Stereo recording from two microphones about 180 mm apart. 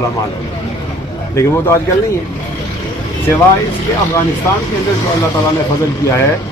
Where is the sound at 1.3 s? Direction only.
15° left (ahead or behind).